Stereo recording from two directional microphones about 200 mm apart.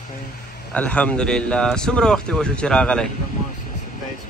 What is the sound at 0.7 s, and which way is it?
Speech, 5° left (ahead or behind).